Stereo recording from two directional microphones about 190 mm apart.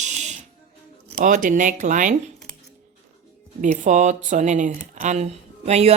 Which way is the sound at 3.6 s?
40° right (ahead or behind).